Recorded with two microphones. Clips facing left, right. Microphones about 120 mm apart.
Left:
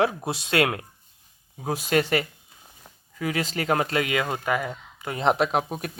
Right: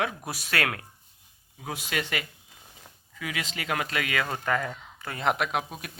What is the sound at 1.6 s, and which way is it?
Speech, 40° left (ahead or behind).